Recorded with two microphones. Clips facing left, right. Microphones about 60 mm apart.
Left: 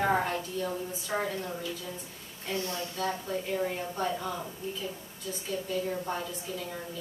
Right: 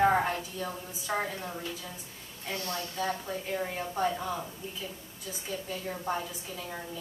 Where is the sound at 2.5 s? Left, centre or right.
Left.